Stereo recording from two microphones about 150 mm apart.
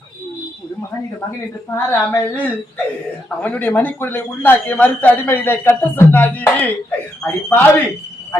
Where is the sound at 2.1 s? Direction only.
10° left (ahead or behind).